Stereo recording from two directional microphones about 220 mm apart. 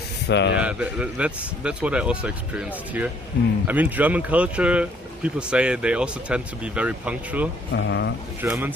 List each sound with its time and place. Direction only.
0.3 s speech: 50° left (ahead or behind)
0.6 s speech: 5° right (ahead or behind)
7.7 s speech: 50° left (ahead or behind)
8.4 s speech: 10° right (ahead or behind)